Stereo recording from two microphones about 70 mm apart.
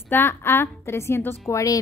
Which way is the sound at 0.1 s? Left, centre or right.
Left.